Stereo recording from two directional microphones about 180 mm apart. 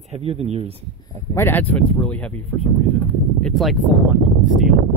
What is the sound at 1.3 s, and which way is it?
Speech, 10° left (ahead or behind).